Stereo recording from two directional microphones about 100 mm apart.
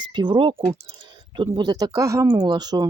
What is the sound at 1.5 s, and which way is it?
Speech, 45° right (ahead or behind).